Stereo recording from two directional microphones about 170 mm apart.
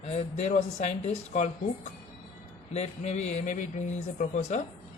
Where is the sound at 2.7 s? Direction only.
40° left (ahead or behind).